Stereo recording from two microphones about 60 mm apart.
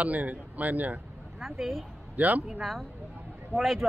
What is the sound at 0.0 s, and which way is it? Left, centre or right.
Speech, right.